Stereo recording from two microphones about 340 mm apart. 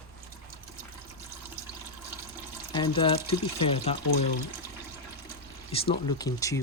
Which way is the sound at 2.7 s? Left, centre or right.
Centre.